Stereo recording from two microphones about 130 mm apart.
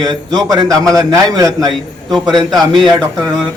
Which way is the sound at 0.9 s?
30° right (ahead or behind).